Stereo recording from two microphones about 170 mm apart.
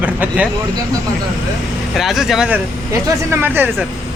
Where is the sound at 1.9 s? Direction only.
Centre (ahead or behind).